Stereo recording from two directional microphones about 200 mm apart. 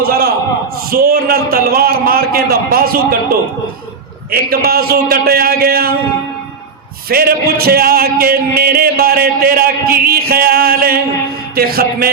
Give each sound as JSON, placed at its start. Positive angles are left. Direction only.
{"t": 0.0, "sound": "a man's voice", "side_deg": -50}
{"t": 4.3, "sound": "a man's voice", "side_deg": -50}
{"t": 7.1, "sound": "a man's voice", "side_deg": -50}